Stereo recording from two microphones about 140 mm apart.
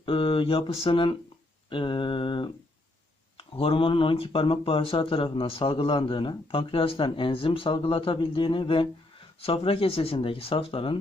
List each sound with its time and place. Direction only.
0.0 s speech: 40° left (ahead or behind)